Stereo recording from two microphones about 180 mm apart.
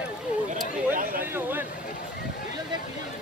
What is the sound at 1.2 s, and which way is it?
Vehicle, 10° right (ahead or behind).